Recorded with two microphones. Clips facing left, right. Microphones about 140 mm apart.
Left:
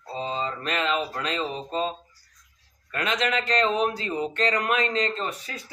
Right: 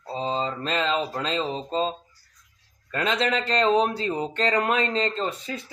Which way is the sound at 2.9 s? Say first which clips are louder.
Right 2 dB; 30° right (ahead or behind).